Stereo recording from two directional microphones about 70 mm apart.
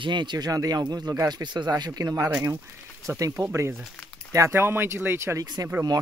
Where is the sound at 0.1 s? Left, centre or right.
Right.